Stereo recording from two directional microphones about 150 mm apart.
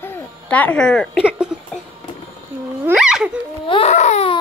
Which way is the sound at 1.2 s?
5° right (ahead or behind).